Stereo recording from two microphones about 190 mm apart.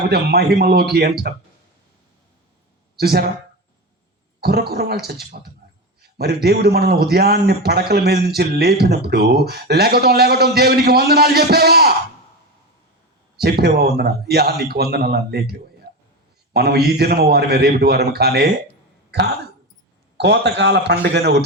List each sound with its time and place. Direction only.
0.1 s a man's voice: 55° right (ahead or behind)
2.9 s speech: 55° right (ahead or behind)
4.4 s a man's voice: 55° right (ahead or behind)
13.3 s a man's voice: 55° right (ahead or behind)
20.1 s a man's voice: 60° right (ahead or behind)